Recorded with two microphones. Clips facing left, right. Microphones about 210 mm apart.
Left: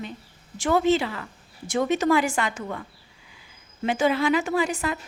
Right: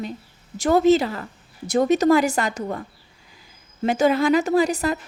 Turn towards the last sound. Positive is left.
turn(degrees=-40)  # may be behind; listen again after turning